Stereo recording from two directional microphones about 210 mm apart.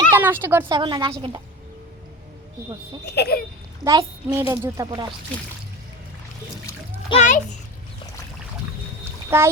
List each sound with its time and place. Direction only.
0.1 s speech: 10° right (ahead or behind)
0.7 s a woman's voice: 20° right (ahead or behind)
3.1 s speech: 50° left (ahead or behind)
3.8 s a child's voice: 15° right (ahead or behind)
7.1 s a child's voice: 35° left (ahead or behind)
9.3 s a child's voice: 10° right (ahead or behind)